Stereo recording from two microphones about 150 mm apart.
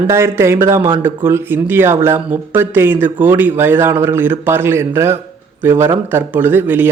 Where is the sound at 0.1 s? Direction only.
15° right (ahead or behind).